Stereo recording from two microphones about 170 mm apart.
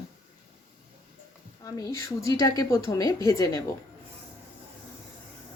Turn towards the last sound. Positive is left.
turn(degrees=20)  # may be behind; listen again after turning